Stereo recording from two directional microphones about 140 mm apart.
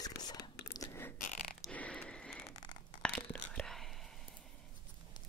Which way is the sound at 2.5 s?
30° left (ahead or behind).